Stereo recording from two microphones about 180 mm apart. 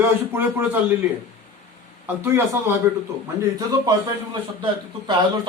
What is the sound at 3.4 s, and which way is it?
Speech, 20° right (ahead or behind).